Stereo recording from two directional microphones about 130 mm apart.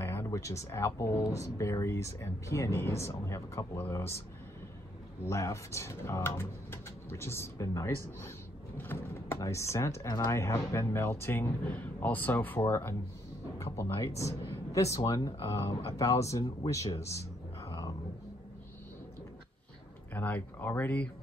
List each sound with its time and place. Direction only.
0.0 s speech: 20° left (ahead or behind)
5.3 s speech: 20° left (ahead or behind)
17.6 s dog: 30° left (ahead or behind)
20.2 s speech: 15° left (ahead or behind)